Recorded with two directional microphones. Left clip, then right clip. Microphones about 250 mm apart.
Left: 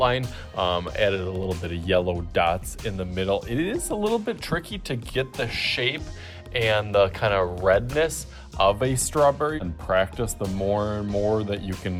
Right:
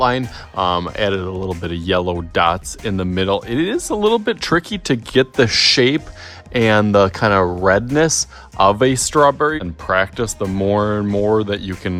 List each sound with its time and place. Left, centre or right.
0.0 s speech: right